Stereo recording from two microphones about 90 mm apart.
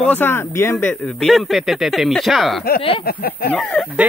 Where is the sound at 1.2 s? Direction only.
Centre (ahead or behind).